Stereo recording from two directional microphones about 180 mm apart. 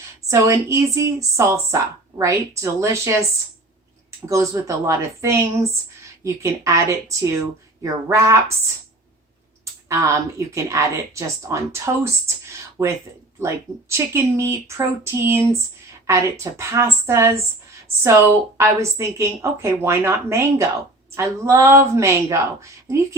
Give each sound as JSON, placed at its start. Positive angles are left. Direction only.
{"t": 0.3, "sound": "a woman's voice", "side_deg": -15}
{"t": 4.3, "sound": "a woman's voice", "side_deg": -20}
{"t": 9.9, "sound": "a woman's voice", "side_deg": -15}